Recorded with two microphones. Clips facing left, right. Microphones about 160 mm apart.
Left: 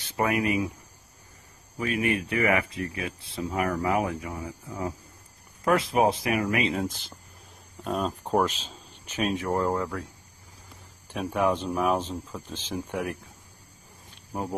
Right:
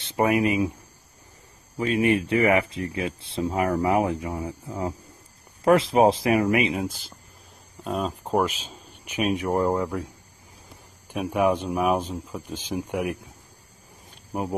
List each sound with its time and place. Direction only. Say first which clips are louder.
0.0 s speech: right 4 dB; 25° right (ahead or behind)
1.8 s speech: right 5 dB; 25° right (ahead or behind)
6.8 s speech: right 1 dB; 5° right (ahead or behind)
14.3 s speech: right 3 dB; 20° right (ahead or behind)